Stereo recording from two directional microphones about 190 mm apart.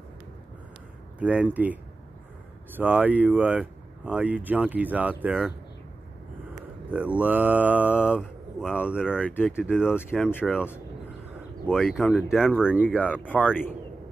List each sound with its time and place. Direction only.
1.2 s speech: 5° right (ahead or behind)
6.9 s speech: 10° right (ahead or behind)
9.2 s speech: 10° left (ahead or behind)
9.6 s speech: 5° right (ahead or behind)
9.9 s speech: 5° left (ahead or behind)
13.0 s speech: 10° left (ahead or behind)